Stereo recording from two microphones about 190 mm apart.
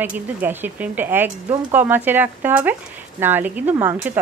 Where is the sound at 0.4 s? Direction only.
10° right (ahead or behind).